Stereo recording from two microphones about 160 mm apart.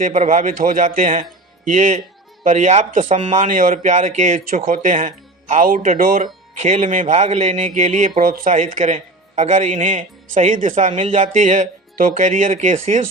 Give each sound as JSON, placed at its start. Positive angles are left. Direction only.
{"t": 0.0, "sound": "speech", "side_deg": -50}
{"t": 6.5, "sound": "a man's voice", "side_deg": -45}
{"t": 8.2, "sound": "a man's voice", "side_deg": -60}